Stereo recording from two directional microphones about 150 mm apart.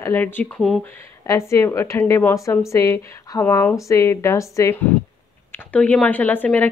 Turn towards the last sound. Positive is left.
turn(degrees=10)  # may be behind; listen again after turning